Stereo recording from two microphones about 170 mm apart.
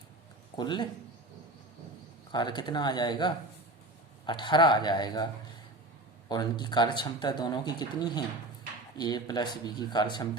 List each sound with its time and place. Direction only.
0.5 s speech: 25° left (ahead or behind)
2.3 s speech: 25° left (ahead or behind)